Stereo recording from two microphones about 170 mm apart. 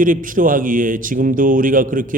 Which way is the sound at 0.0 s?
50° right (ahead or behind).